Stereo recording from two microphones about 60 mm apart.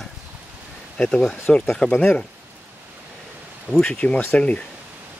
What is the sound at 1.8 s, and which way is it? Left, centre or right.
Speech, left.